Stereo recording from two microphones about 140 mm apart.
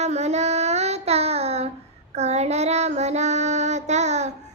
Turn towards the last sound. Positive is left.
turn(degrees=-55)  # may be behind; listen again after turning